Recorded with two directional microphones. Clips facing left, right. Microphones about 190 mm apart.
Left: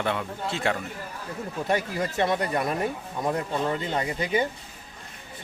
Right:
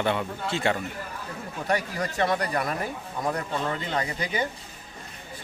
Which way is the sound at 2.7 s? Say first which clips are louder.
Left 3 dB; centre (ahead or behind).